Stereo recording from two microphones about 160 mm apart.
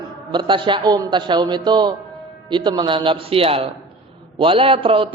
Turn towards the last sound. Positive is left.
turn(degrees=-35)  # may be behind; listen again after turning